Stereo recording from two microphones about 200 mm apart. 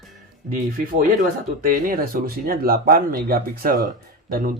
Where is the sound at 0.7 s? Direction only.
40° right (ahead or behind).